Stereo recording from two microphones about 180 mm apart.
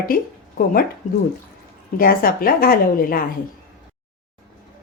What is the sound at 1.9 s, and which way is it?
A woman's voice, 55° left (ahead or behind).